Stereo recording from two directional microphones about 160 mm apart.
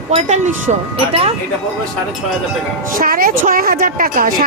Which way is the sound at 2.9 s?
60° right (ahead or behind).